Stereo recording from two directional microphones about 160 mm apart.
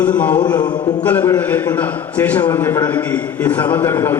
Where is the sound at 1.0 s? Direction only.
15° left (ahead or behind).